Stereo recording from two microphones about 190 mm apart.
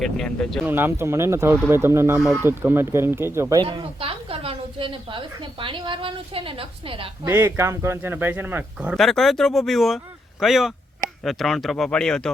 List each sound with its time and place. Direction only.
0.0 s speech: 5° left (ahead or behind)
0.6 s a man's voice: 10° right (ahead or behind)
3.6 s speech: 25° right (ahead or behind)
7.3 s a man's voice: 15° right (ahead or behind); by 12.3 s 5° left (ahead or behind)